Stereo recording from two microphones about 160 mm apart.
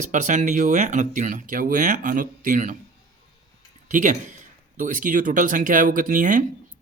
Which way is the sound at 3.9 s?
55° right (ahead or behind).